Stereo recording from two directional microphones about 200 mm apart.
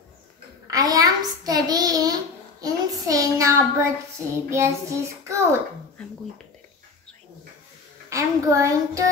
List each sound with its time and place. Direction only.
0.7 s a child's voice: 20° right (ahead or behind)
2.6 s child singing: 15° right (ahead or behind)
8.1 s a child's voice: 15° right (ahead or behind)